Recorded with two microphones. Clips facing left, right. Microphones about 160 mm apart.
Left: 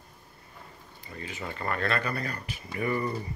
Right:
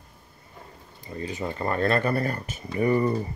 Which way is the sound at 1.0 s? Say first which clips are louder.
Right 7 dB; 35° right (ahead or behind).